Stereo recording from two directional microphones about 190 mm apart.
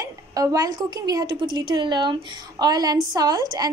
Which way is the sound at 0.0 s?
20° right (ahead or behind).